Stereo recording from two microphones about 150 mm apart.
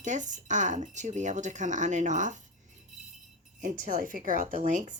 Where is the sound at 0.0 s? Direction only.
55° right (ahead or behind).